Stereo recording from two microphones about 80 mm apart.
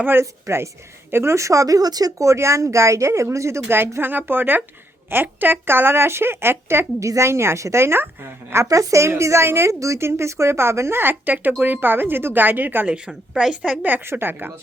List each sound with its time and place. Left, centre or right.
0.0 s speech: right
8.6 s speech: right
13.1 s a woman's voice: centre
13.8 s speech: right